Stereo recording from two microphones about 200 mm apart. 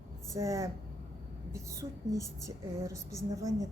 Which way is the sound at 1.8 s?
15° right (ahead or behind).